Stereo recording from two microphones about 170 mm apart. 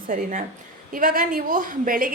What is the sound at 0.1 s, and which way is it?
Speech, 50° right (ahead or behind).